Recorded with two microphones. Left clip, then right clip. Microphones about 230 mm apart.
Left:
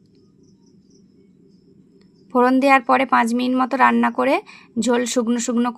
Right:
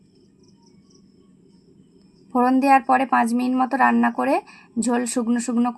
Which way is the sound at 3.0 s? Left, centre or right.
Left.